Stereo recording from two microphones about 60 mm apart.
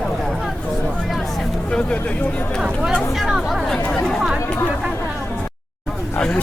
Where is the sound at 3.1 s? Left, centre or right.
Centre.